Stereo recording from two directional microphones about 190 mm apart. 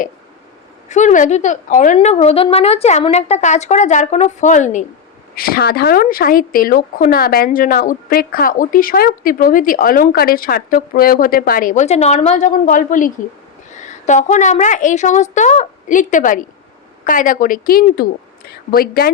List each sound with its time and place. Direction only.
0.9 s speech: 40° left (ahead or behind)
5.3 s speech: 50° left (ahead or behind)